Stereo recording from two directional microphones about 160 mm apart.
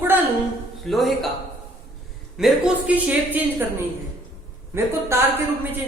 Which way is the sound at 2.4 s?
5° right (ahead or behind).